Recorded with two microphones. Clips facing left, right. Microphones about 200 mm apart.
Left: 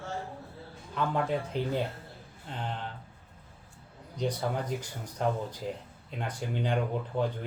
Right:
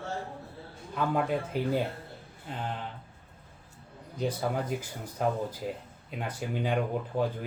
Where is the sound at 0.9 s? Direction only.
5° right (ahead or behind).